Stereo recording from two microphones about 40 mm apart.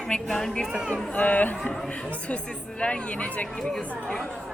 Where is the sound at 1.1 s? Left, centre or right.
Left.